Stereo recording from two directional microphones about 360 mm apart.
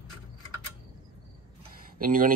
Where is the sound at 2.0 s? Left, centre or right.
Right.